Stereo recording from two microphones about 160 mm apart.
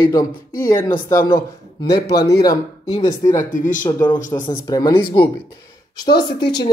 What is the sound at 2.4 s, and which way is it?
A man's voice, 20° left (ahead or behind).